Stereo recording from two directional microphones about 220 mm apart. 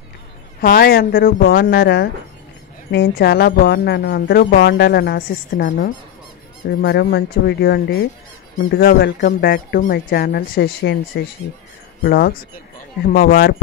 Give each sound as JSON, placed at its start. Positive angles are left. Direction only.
{"t": 0.6, "sound": "speech", "side_deg": 40}
{"t": 6.8, "sound": "speech", "side_deg": 45}